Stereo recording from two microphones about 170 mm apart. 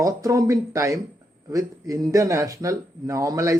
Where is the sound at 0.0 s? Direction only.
20° right (ahead or behind).